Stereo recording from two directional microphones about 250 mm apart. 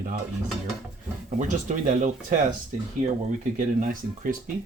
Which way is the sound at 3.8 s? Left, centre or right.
Right.